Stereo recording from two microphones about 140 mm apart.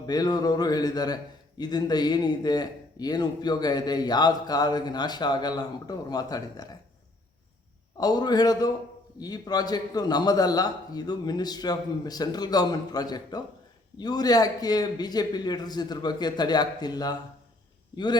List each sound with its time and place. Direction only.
0.0 s a man's voice: 30° left (ahead or behind)
7.9 s a man's voice: 30° left (ahead or behind)